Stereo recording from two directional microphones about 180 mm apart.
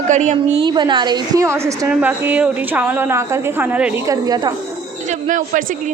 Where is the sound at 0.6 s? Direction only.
25° right (ahead or behind); by 3.9 s 10° right (ahead or behind).